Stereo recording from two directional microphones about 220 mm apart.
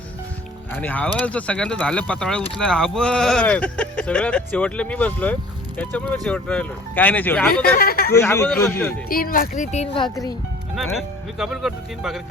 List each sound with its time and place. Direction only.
0.7 s speech: 5° left (ahead or behind)
7.6 s speech: 45° left (ahead or behind)
8.1 s speech: 10° left (ahead or behind)
9.0 s speech: 40° left (ahead or behind); by 10.1 s 25° left (ahead or behind)
10.9 s speech: centre (ahead or behind)